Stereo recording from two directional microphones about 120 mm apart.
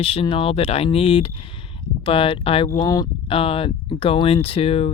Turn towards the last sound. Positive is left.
turn(degrees=50)  # may be behind; listen again after turning